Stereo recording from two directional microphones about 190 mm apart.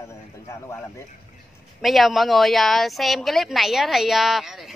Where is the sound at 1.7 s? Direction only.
Centre (ahead or behind).